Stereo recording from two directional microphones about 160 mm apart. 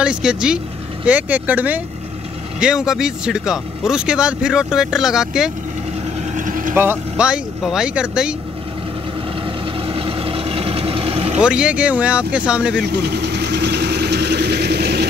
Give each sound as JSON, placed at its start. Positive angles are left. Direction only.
{"t": 0.0, "sound": "speech", "side_deg": -5}
{"t": 6.3, "sound": "vehicle", "side_deg": -55}
{"t": 6.7, "sound": "speech", "side_deg": -15}
{"t": 9.8, "sound": "vehicle", "side_deg": -35}
{"t": 11.3, "sound": "speech", "side_deg": -5}
{"t": 12.8, "sound": "vehicle", "side_deg": -90}